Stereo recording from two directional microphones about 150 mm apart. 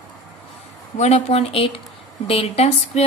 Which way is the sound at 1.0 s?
45° left (ahead or behind).